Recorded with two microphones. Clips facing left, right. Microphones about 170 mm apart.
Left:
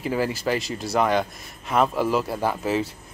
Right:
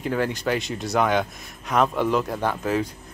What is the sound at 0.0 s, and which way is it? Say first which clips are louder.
Speech: even; 5° left (ahead or behind).